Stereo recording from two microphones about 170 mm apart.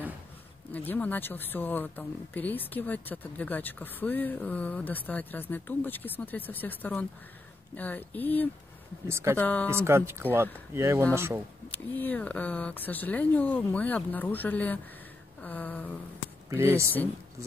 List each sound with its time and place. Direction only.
0.7 s speech: 10° left (ahead or behind)
9.0 s speech: 15° right (ahead or behind)
9.4 s speech: 10° left (ahead or behind)
9.7 s speech: 15° right (ahead or behind)
11.9 s speech: 10° left (ahead or behind)
16.4 s speech: 15° right (ahead or behind)